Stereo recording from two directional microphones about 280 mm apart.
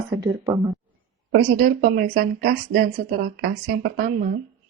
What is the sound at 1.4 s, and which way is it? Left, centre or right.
Speech, right.